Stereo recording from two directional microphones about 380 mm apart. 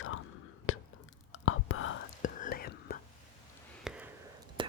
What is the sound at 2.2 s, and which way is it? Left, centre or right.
Whispering, left.